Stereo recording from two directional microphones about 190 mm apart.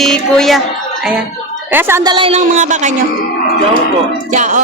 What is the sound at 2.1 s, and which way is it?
Speech, 30° right (ahead or behind).